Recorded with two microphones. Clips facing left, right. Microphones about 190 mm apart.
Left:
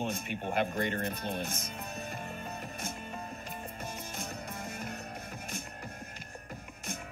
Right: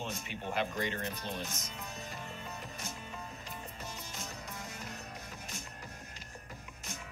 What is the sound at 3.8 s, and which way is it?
Music, 55° left (ahead or behind).